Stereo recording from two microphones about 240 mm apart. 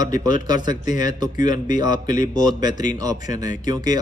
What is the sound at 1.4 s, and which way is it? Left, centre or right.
Speech, left.